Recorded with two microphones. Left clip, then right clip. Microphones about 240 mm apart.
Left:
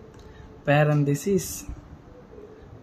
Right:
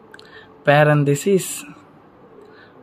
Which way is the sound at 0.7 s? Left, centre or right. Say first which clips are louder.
Right 8 dB; centre.